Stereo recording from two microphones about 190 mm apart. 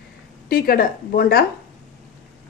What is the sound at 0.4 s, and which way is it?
Speech, 50° left (ahead or behind).